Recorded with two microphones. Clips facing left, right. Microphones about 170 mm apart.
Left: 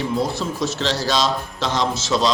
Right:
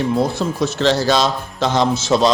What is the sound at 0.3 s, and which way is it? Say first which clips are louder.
A man's voice: right 4 dB; 55° right (ahead or behind).